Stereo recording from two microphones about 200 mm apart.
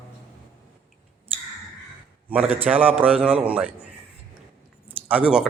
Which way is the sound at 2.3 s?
5° right (ahead or behind).